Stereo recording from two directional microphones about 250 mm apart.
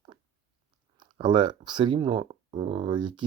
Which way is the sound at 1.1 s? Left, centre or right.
Centre.